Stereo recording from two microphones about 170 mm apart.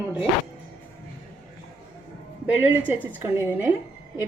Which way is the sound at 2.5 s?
10° right (ahead or behind).